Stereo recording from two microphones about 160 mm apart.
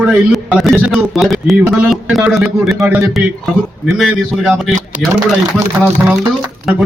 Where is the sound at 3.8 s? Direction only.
Centre (ahead or behind).